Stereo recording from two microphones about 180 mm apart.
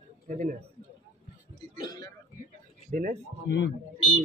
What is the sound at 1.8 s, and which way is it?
Speech, 20° left (ahead or behind).